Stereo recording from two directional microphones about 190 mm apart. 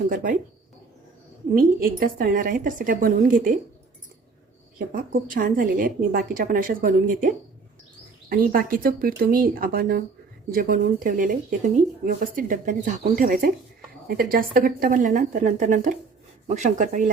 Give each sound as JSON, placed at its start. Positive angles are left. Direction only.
{"t": 0.1, "sound": "speech", "side_deg": -45}
{"t": 1.5, "sound": "speech", "side_deg": -50}
{"t": 4.9, "sound": "speech", "side_deg": -45}